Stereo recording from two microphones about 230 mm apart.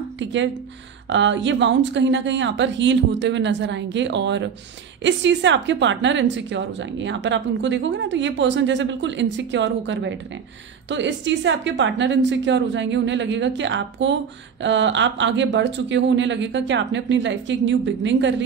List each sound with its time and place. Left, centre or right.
0.2 s a woman's voice: right